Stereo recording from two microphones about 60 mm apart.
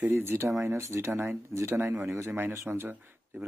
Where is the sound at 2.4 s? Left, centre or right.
Right.